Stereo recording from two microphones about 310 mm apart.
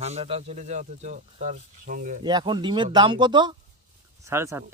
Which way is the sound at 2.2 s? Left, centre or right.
Centre.